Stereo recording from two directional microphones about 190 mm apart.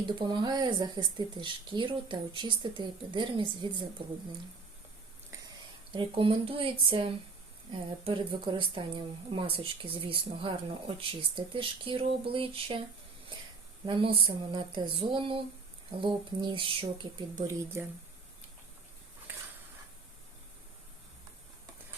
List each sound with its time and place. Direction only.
0.0 s speech: 25° right (ahead or behind)
5.3 s a sound: 15° right (ahead or behind)
5.9 s speech: 25° right (ahead or behind)
13.8 s speech: 25° right (ahead or behind)
19.3 s dog: 10° right (ahead or behind)